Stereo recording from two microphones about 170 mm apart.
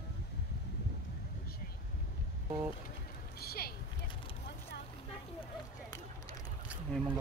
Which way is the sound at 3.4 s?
65° left (ahead or behind).